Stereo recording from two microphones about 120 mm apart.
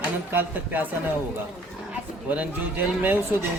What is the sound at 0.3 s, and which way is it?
Speech, 15° right (ahead or behind).